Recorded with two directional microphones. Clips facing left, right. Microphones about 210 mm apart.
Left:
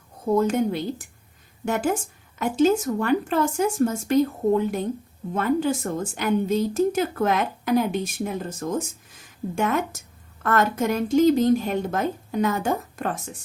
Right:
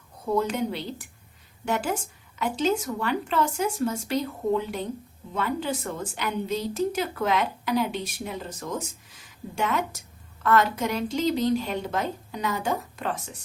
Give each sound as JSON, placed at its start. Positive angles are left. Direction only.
{"t": 0.3, "sound": "a woman's voice", "side_deg": 45}